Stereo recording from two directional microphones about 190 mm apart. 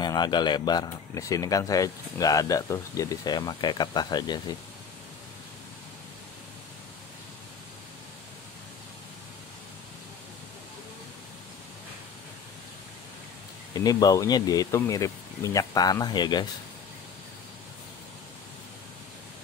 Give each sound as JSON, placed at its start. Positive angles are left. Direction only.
{"t": 0.0, "sound": "speech", "side_deg": 25}
{"t": 13.7, "sound": "speech", "side_deg": 20}